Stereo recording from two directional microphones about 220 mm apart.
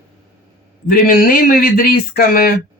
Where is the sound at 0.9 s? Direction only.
40° left (ahead or behind).